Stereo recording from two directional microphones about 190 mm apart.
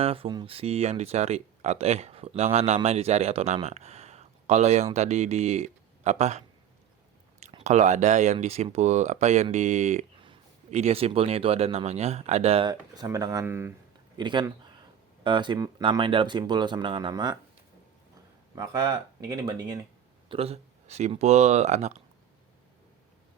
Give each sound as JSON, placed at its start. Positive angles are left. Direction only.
{"t": 0.0, "sound": "speech", "side_deg": -30}
{"t": 7.6, "sound": "speech", "side_deg": -40}
{"t": 14.2, "sound": "speech", "side_deg": -25}
{"t": 18.5, "sound": "speech", "side_deg": -20}
{"t": 20.2, "sound": "speech", "side_deg": -30}